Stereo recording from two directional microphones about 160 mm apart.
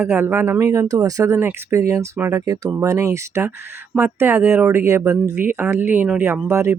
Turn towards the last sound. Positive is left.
turn(degrees=-15)  # may be behind; listen again after turning